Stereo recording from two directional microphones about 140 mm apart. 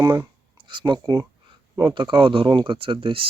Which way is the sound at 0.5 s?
35° right (ahead or behind).